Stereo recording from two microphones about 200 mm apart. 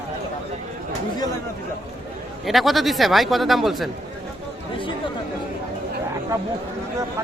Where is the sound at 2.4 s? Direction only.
Centre (ahead or behind).